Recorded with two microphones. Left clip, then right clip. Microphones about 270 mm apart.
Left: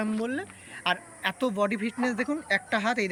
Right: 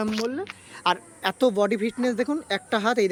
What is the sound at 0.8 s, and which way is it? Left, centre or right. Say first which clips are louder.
Speech: right 4 dB; centre.